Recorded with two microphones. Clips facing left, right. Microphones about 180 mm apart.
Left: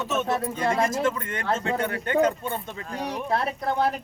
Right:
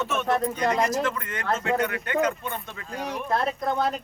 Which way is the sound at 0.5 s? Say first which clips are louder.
Even; 25° left (ahead or behind).